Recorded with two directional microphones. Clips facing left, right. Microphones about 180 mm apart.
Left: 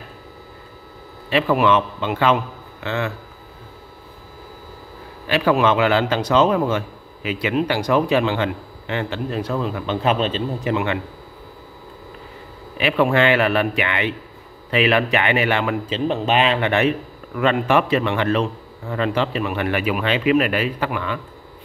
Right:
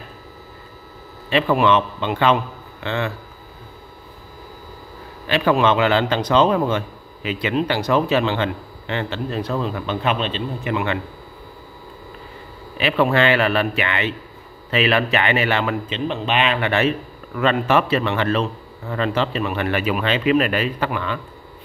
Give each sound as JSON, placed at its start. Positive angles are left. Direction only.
{"t": 1.3, "sound": "a man's voice", "side_deg": 10}
{"t": 5.2, "sound": "a man's voice", "side_deg": 10}
{"t": 10.0, "sound": "a man's voice", "side_deg": 40}
{"t": 10.7, "sound": "speech", "side_deg": 20}
{"t": 12.7, "sound": "a man's voice", "side_deg": 15}
{"t": 15.9, "sound": "a man's voice", "side_deg": 40}
{"t": 16.5, "sound": "a man's voice", "side_deg": 20}